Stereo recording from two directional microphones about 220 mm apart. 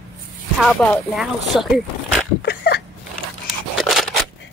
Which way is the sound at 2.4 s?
45° left (ahead or behind).